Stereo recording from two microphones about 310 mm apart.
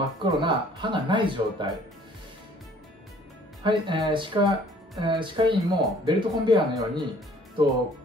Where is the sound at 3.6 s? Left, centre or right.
Centre.